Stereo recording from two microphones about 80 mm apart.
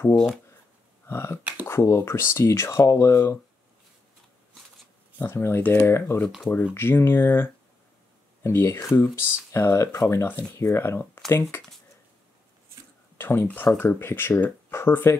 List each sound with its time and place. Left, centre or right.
1.0 s speech: left
5.2 s speech: left
13.2 s speech: left